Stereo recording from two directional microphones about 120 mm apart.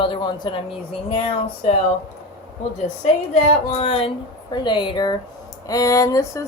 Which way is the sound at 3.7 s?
55° left (ahead or behind).